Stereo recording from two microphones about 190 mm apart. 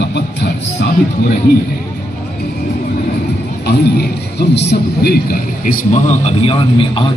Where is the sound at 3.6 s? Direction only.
60° left (ahead or behind); by 7.1 s 30° left (ahead or behind).